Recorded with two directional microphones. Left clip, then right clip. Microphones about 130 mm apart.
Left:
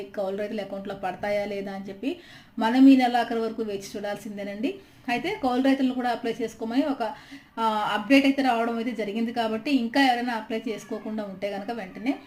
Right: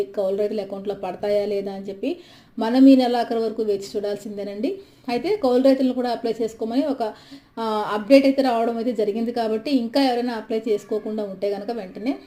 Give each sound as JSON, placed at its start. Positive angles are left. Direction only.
{"t": 0.3, "sound": "a woman's voice", "side_deg": -15}